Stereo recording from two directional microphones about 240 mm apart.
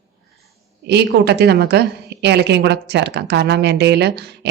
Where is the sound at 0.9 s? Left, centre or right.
Right.